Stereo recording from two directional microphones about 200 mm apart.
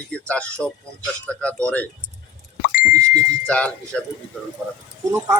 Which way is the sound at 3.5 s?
5° left (ahead or behind).